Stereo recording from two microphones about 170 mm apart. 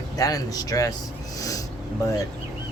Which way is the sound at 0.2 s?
20° left (ahead or behind).